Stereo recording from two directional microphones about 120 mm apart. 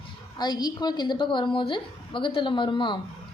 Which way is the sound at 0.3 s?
35° left (ahead or behind).